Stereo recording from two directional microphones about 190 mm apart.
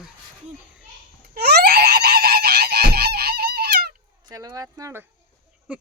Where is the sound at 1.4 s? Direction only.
55° right (ahead or behind).